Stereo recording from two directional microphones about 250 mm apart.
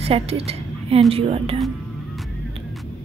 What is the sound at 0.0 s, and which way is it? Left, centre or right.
A woman's voice, right.